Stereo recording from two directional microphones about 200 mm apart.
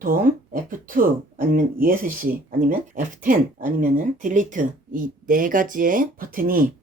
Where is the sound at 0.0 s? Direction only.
45° right (ahead or behind).